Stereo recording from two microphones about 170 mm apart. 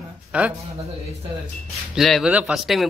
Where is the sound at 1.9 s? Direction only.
Centre (ahead or behind).